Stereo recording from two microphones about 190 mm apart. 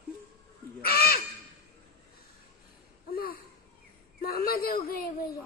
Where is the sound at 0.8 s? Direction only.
50° left (ahead or behind).